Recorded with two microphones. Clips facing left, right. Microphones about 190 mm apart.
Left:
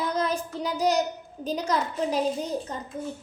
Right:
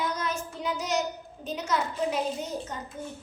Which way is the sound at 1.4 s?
35° left (ahead or behind).